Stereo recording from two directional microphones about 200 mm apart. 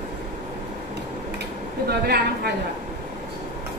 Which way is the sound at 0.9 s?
55° right (ahead or behind).